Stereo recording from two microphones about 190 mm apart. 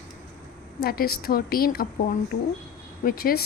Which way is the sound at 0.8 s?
55° left (ahead or behind).